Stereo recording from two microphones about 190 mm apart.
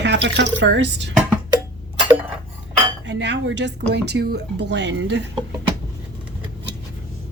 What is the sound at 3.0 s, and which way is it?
Cutlery, 70° right (ahead or behind).